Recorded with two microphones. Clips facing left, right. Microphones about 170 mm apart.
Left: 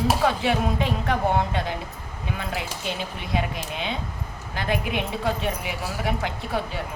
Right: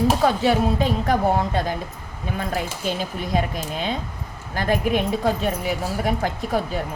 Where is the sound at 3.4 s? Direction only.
40° right (ahead or behind).